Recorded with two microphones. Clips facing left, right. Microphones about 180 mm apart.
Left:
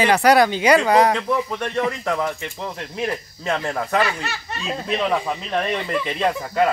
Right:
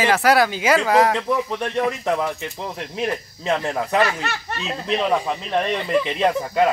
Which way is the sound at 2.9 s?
Centre (ahead or behind).